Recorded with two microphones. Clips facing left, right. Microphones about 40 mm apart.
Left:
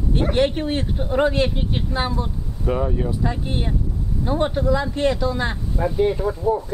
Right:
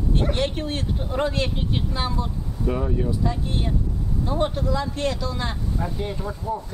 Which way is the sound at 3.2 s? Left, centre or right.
Left.